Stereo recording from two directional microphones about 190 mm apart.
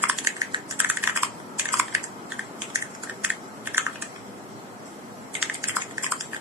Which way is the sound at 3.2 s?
10° right (ahead or behind).